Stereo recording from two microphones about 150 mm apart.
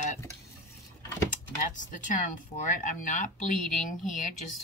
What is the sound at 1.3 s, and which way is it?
Speech, 60° left (ahead or behind).